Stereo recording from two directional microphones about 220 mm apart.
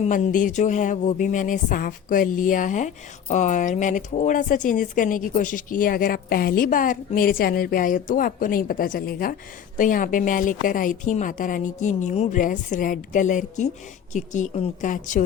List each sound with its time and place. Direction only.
0.0 s speech: 35° left (ahead or behind)